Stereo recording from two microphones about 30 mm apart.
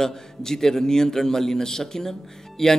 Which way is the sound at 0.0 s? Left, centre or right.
Centre.